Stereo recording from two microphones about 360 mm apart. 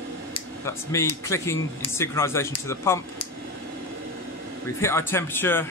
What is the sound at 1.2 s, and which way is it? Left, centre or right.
Speech, centre.